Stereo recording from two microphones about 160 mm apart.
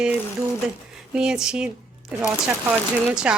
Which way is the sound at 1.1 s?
5° right (ahead or behind).